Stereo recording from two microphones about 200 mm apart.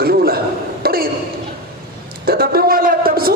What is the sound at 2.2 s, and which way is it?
A man's voice, 50° right (ahead or behind).